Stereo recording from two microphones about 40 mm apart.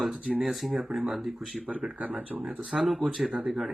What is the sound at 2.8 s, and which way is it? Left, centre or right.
Speech, centre.